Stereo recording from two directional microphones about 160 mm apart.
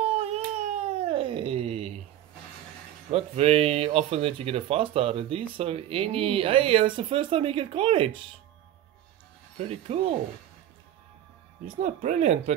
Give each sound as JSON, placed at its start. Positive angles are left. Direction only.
{"t": 0.0, "sound": "cat", "side_deg": -40}
{"t": 3.1, "sound": "speech", "side_deg": -40}
{"t": 9.7, "sound": "speech", "side_deg": -35}
{"t": 11.6, "sound": "speech", "side_deg": -45}